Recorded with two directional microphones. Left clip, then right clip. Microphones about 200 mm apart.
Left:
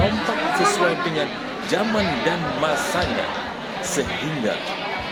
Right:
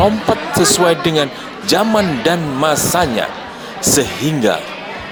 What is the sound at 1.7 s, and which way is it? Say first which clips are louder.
A man's voice: right 8 dB; 55° right (ahead or behind).